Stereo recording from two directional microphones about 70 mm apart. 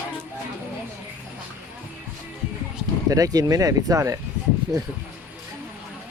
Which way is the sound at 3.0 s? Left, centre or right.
Right.